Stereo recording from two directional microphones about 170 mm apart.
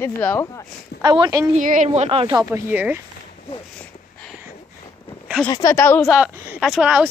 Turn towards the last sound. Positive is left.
turn(degrees=-5)  # may be behind; listen again after turning